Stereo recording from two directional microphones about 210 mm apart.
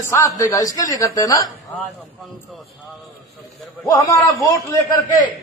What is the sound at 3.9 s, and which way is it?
Speech, 15° left (ahead or behind).